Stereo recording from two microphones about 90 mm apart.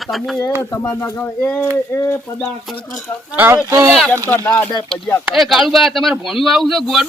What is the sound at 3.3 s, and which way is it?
Speech, 20° right (ahead or behind).